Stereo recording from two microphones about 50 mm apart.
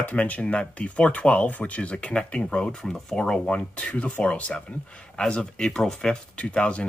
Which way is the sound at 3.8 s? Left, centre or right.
Left.